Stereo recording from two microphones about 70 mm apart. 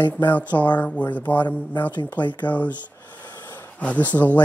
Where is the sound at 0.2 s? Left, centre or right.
Left.